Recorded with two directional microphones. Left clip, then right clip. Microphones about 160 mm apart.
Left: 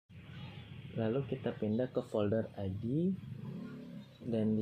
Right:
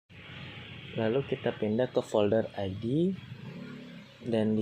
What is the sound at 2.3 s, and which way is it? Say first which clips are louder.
Speech: right 8 dB; 50° right (ahead or behind).